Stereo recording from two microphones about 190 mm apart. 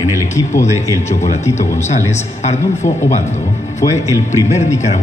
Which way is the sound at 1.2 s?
35° left (ahead or behind).